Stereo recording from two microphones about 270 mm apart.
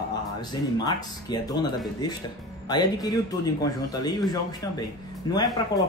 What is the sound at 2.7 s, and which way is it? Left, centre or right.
Speech, centre.